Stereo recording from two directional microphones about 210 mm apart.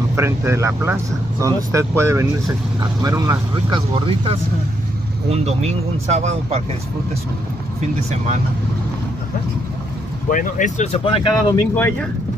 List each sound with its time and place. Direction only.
0.1 s speech: 10° right (ahead or behind); by 6.6 s 30° right (ahead or behind)
10.3 s speech: 40° left (ahead or behind)
11.7 s speech: 10° left (ahead or behind)